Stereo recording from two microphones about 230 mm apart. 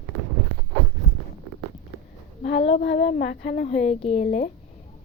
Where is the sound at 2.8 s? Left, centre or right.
Left.